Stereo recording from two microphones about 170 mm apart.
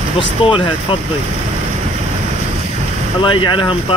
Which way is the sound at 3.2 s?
30° left (ahead or behind).